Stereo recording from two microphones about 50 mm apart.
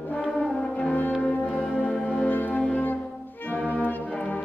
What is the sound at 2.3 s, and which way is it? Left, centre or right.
Music, left.